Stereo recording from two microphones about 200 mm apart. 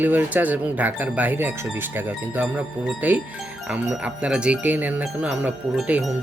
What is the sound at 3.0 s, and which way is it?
Speech, 10° right (ahead or behind).